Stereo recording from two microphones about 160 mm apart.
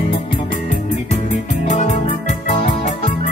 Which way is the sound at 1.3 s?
50° left (ahead or behind).